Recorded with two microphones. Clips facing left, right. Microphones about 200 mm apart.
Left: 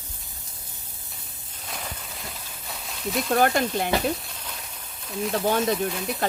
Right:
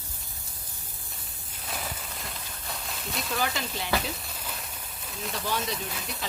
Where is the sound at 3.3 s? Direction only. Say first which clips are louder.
Left 10 dB; 55° left (ahead or behind).